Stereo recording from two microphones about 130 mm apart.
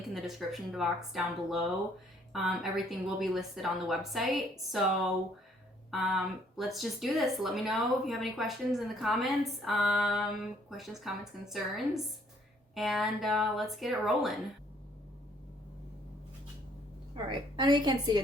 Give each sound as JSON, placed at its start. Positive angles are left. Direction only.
{"t": 0.0, "sound": "speech", "side_deg": 0}
{"t": 5.9, "sound": "speech", "side_deg": 0}
{"t": 12.7, "sound": "speech", "side_deg": 0}
{"t": 17.2, "sound": "a woman's voice", "side_deg": -35}